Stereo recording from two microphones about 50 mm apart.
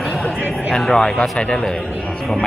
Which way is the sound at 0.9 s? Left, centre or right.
Centre.